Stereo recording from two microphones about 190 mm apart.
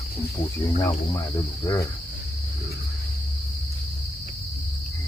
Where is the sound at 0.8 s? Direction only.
15° left (ahead or behind).